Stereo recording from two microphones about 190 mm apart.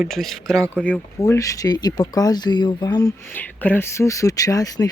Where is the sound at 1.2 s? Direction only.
15° left (ahead or behind).